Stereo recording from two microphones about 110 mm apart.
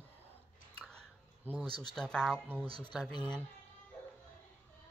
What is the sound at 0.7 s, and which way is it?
Chewing, 5° left (ahead or behind).